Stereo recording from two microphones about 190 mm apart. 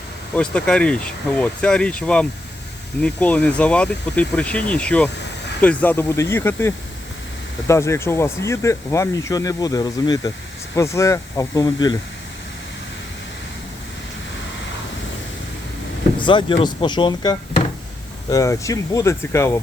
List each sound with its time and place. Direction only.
0.3 s speech: 5° left (ahead or behind); by 11.9 s 20° left (ahead or behind)
16.1 s speech: 25° left (ahead or behind)